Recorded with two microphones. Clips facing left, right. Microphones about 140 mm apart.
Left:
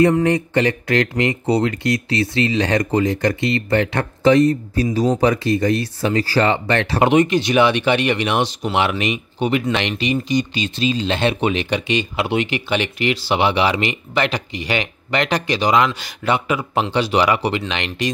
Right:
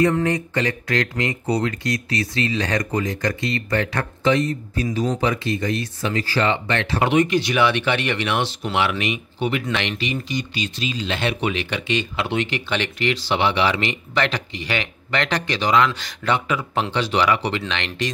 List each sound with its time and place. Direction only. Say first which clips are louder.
0.1 s speech: left 5 dB; 25° left (ahead or behind)
4.2 s speech: left 7 dB; 35° left (ahead or behind)
7.0 s speech: left 3 dB; 20° left (ahead or behind)